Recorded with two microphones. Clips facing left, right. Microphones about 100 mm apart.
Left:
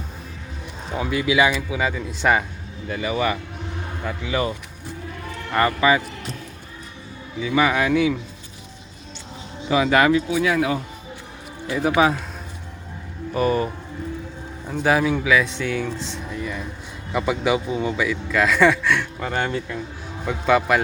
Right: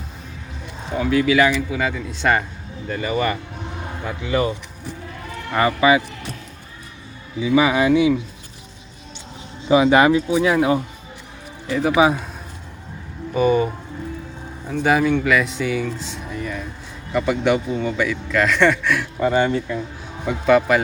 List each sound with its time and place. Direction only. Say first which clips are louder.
1.1 s a man's voice: right 3 dB; 5° left (ahead or behind); by 6.0 s 10° right (ahead or behind)
7.4 s a man's voice: right 3 dB; 10° right (ahead or behind)
9.6 s speech: right 4 dB; 20° right (ahead or behind)
11.9 s a man's voice: right 2 dB; 15° right (ahead or behind)
13.3 s speech: right 3 dB; centre (ahead or behind)
14.7 s speech: right 2 dB; centre (ahead or behind)